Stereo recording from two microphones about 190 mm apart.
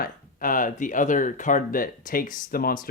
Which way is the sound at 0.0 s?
45° left (ahead or behind).